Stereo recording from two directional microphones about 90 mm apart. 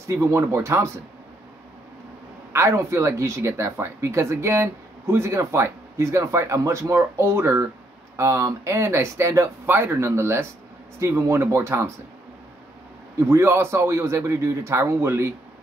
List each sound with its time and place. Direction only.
0.0 s speech: 30° right (ahead or behind)
2.5 s speech: 30° right (ahead or behind)
13.3 s a man's voice: 30° right (ahead or behind)